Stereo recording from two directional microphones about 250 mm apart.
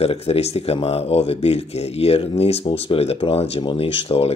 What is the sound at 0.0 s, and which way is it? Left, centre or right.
Speech, left.